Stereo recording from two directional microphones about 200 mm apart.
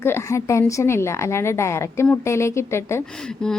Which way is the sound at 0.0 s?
15° left (ahead or behind).